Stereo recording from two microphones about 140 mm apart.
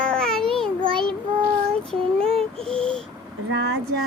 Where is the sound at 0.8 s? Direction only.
35° right (ahead or behind).